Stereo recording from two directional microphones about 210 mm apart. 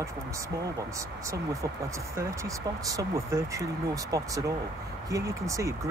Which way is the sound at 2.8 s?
15° right (ahead or behind).